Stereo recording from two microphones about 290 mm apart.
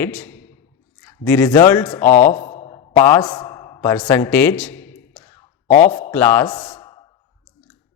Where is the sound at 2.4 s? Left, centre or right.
Left.